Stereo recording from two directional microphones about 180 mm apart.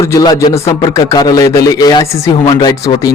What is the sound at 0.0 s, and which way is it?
Speech, 20° left (ahead or behind).